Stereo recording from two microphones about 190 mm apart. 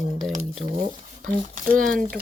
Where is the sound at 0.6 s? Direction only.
35° right (ahead or behind).